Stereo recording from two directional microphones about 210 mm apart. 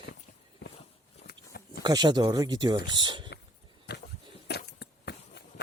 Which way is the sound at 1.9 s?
20° right (ahead or behind).